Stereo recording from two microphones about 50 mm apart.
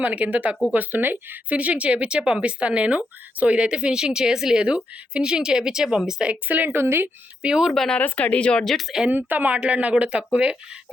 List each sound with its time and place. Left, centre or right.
0.0 s speech: right
1.5 s speech: right
6.5 s speech: right
6.7 s a woman's voice: right
7.4 s speech: centre
7.7 s speech: centre
7.9 s speech: left
8.6 s speech: centre
9.0 s speech: right
9.6 s speech: right